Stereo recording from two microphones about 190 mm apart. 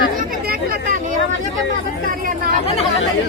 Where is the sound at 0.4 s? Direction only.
50° right (ahead or behind).